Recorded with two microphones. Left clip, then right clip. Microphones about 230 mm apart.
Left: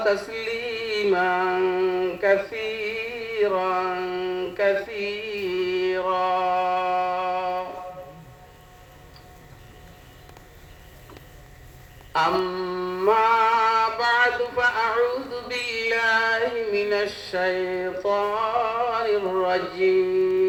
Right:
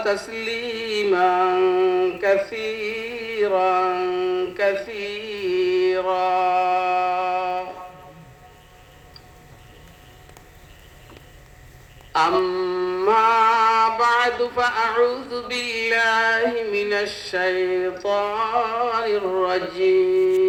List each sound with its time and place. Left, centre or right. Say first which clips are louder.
0.0 s music: even; right
12.1 s mantra: right 3 dB; right